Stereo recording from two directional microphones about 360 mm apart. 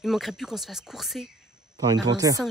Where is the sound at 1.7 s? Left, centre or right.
Centre.